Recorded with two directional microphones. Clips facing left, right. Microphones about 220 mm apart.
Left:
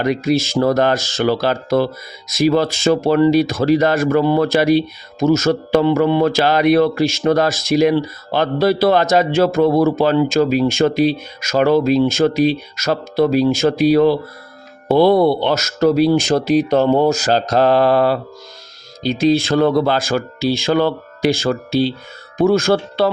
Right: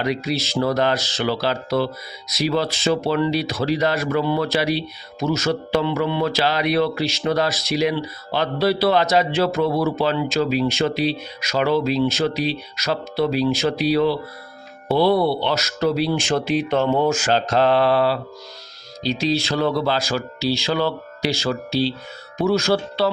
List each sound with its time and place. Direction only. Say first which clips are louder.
0.0 s speech: left 6 dB; 50° left (ahead or behind)